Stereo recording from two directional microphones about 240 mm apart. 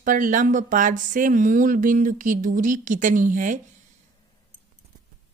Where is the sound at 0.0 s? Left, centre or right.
Right.